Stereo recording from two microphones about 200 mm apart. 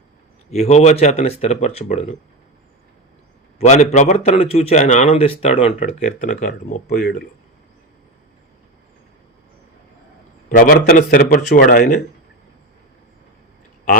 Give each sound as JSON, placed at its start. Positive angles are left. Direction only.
{"t": 0.5, "sound": "a man's voice", "side_deg": 30}
{"t": 3.6, "sound": "a man's voice", "side_deg": 35}
{"t": 10.5, "sound": "a man's voice", "side_deg": 45}